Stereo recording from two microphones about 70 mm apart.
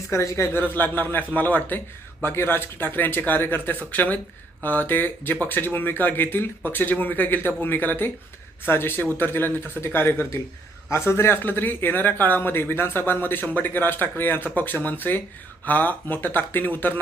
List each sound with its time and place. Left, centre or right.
0.1 s speech: left
0.6 s a man's voice: left